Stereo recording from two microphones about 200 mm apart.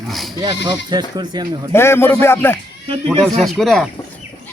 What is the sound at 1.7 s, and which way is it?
Speech, 10° left (ahead or behind).